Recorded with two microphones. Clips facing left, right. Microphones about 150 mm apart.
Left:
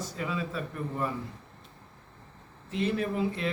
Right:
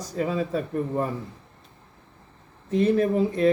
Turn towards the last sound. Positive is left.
turn(degrees=-40)  # may be behind; listen again after turning